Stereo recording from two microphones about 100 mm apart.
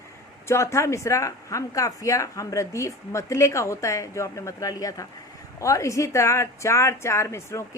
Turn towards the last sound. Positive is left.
turn(degrees=30)  # may be behind; listen again after turning